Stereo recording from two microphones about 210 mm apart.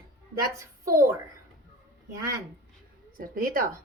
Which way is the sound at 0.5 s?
15° right (ahead or behind).